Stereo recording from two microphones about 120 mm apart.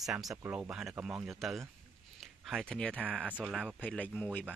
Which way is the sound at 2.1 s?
Centre (ahead or behind).